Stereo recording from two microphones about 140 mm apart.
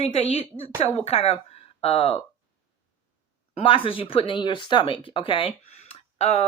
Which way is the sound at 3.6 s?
40° left (ahead or behind).